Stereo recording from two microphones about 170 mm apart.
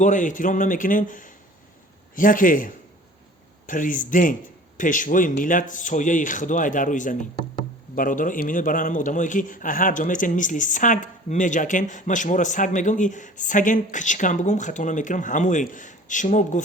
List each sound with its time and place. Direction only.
0.0 s a man's voice: 50° left (ahead or behind)